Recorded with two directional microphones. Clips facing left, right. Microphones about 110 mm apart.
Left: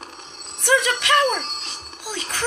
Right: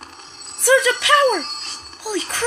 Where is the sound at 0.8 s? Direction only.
35° right (ahead or behind).